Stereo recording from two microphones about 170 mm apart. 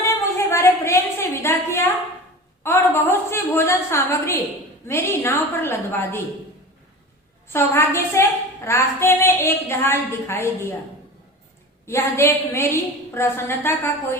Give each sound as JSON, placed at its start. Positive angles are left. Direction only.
{"t": 0.0, "sound": "a sound", "side_deg": 15}
{"t": 2.6, "sound": "a woman's voice", "side_deg": 15}
{"t": 7.5, "sound": "a woman's voice", "side_deg": 15}
{"t": 11.9, "sound": "a woman's voice", "side_deg": 15}